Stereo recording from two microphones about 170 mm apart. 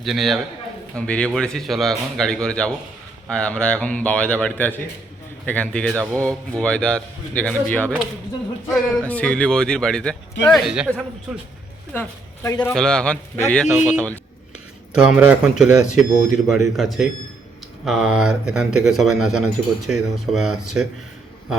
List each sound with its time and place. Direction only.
0.0 s a man's voice: centre (ahead or behind)
11.9 s speech: 15° left (ahead or behind)
12.7 s a man's voice: 5° left (ahead or behind)
14.9 s a man's voice: 5° right (ahead or behind)